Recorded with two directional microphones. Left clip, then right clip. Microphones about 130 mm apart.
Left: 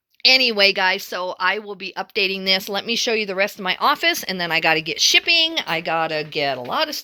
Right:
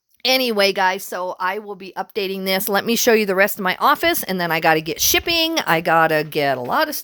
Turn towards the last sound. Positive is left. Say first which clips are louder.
# right 3 dB
turn(degrees=-50)  # may be behind; listen again after turning